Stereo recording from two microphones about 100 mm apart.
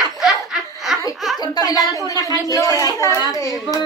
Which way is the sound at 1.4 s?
35° left (ahead or behind).